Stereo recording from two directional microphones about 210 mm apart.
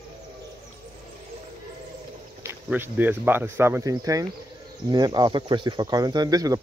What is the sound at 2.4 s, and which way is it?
Speech, 10° right (ahead or behind).